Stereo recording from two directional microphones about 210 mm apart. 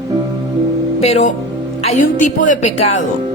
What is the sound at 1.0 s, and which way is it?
A woman's voice, 30° left (ahead or behind).